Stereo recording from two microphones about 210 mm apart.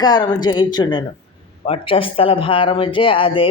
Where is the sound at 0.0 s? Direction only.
20° left (ahead or behind).